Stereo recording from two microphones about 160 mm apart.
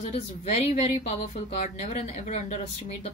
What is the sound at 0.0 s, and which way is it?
A woman's voice, 40° left (ahead or behind).